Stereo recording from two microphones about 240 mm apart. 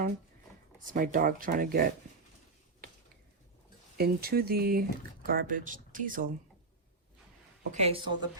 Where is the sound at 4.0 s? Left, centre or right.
Right.